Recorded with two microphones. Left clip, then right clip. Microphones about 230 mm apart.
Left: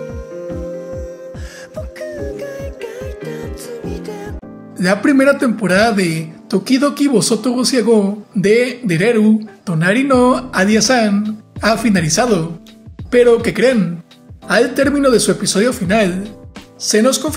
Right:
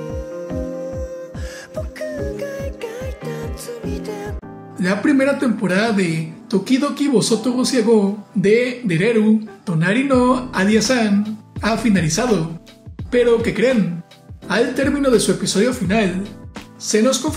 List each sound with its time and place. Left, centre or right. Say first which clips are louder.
1.8 s music: left 1 dB; centre
4.7 s speech: left 4 dB; left